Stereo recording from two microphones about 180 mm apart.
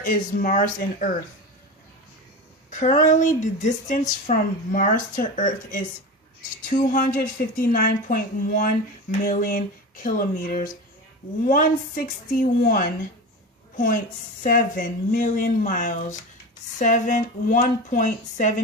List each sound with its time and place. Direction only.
0.0 s a woman's voice: 50° left (ahead or behind)
2.6 s a woman's voice: 45° left (ahead or behind)
6.9 s a woman's voice: 50° left (ahead or behind)
14.4 s a woman's voice: 50° left (ahead or behind)